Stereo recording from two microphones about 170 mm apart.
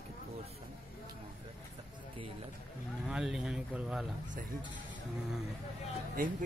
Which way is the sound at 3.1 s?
5° right (ahead or behind).